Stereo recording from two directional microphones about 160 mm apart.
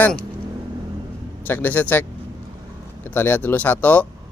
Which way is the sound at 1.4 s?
10° left (ahead or behind).